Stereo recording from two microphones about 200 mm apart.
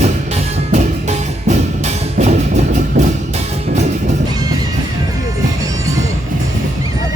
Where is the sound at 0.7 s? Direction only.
35° right (ahead or behind).